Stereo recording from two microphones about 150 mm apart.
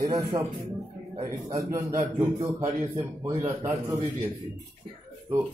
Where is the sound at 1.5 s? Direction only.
20° right (ahead or behind).